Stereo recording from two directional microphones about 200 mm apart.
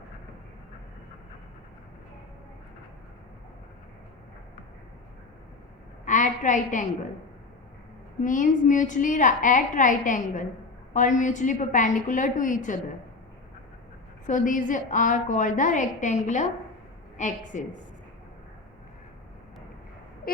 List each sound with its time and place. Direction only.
6.1 s a sound: 40° left (ahead or behind)
8.2 s a woman's voice: 40° left (ahead or behind)
14.3 s a woman's voice: 40° left (ahead or behind)